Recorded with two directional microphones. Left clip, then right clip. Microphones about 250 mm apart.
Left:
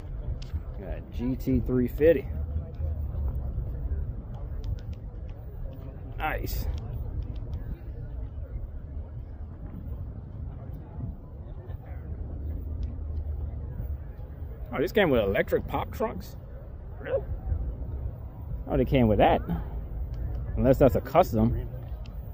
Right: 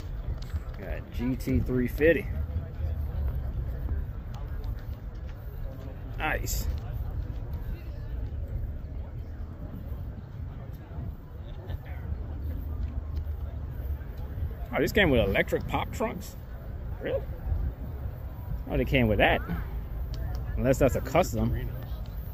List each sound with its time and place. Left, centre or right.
0.8 s speech: centre
6.1 s speech: left
14.7 s speech: left
18.7 s speech: left